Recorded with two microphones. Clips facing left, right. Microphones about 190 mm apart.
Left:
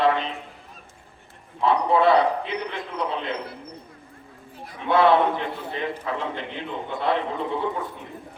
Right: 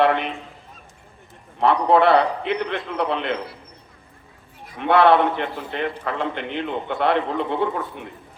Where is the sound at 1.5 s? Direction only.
70° right (ahead or behind).